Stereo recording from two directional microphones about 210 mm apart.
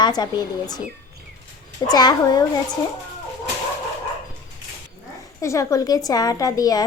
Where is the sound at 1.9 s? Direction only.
20° left (ahead or behind).